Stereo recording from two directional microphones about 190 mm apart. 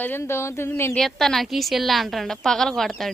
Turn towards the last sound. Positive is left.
turn(degrees=0)  # may be behind; listen again after turning